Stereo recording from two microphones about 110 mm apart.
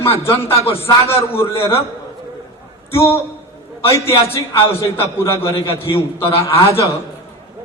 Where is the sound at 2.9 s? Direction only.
25° left (ahead or behind).